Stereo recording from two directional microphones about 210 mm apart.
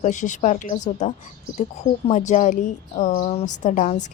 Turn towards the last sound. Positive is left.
turn(degrees=35)  # may be behind; listen again after turning